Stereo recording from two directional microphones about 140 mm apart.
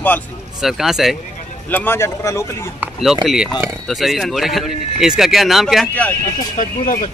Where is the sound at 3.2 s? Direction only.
5° right (ahead or behind).